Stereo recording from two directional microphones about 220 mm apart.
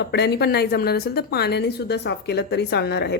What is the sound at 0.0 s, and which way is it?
Speech, 50° left (ahead or behind).